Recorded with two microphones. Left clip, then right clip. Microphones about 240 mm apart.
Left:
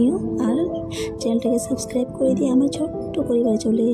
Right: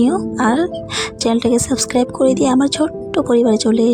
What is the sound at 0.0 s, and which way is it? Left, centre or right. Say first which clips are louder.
Speech: right 5 dB; right.